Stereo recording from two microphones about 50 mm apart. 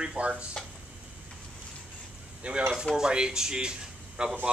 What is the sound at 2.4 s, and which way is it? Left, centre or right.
Speech, right.